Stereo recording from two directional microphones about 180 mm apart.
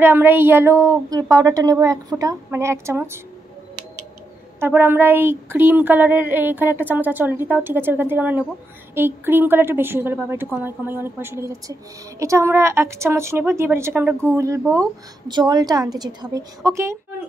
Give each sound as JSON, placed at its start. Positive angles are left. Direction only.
{"t": 0.0, "sound": "a woman's voice", "side_deg": -10}
{"t": 4.6, "sound": "a woman's voice", "side_deg": -15}